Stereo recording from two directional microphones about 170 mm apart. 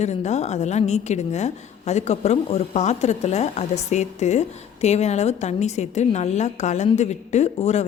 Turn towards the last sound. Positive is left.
turn(degrees=40)  # may be behind; listen again after turning